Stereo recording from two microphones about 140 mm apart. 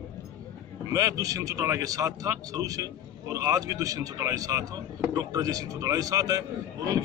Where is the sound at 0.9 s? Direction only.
25° right (ahead or behind).